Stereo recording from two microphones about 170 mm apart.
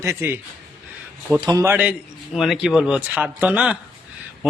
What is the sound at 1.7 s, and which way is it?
Speech, 10° right (ahead or behind).